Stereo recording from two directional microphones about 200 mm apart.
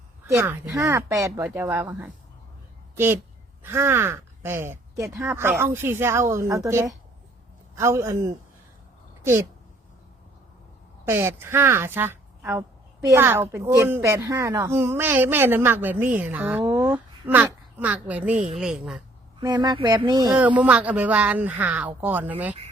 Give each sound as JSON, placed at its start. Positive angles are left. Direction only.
{"t": 0.3, "sound": "speech", "side_deg": -10}
{"t": 11.0, "sound": "speech", "side_deg": -15}
{"t": 19.4, "sound": "speech", "side_deg": -20}
{"t": 20.6, "sound": "speech", "side_deg": -5}